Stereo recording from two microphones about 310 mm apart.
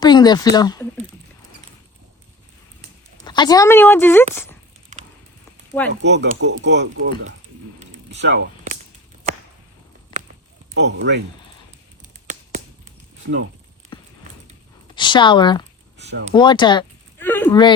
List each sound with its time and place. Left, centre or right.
0.0 s speech: centre
3.2 s speech: centre
5.9 s speech: right
8.2 s a sound: right
10.8 s speech: right
12.3 s a sound: right
13.9 s clip-clop: centre
14.9 s speech: centre
16.0 s a sound: right
16.3 s speech: centre